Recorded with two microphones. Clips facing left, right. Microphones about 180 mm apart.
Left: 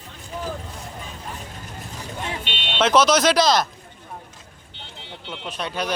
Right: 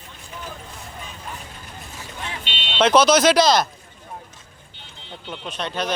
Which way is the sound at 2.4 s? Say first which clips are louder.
Left 2 dB; 50° left (ahead or behind).